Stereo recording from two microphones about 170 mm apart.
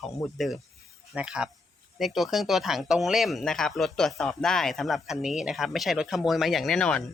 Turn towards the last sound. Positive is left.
turn(degrees=5)  # may be behind; listen again after turning